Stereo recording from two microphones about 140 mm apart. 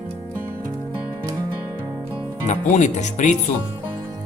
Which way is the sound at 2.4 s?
60° left (ahead or behind).